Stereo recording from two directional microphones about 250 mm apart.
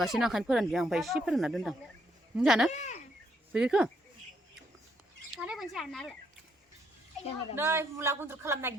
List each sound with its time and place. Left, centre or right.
0.0 s speech: centre
2.7 s speech: left
3.5 s speech: centre
5.4 s speech: centre
7.5 s a man's voice: centre